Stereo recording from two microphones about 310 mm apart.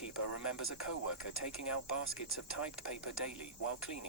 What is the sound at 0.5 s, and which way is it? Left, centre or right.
Speech, left.